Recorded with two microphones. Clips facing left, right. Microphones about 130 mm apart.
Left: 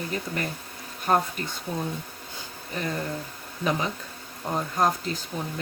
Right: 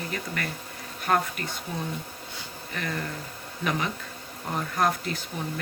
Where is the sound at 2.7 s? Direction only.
25° left (ahead or behind).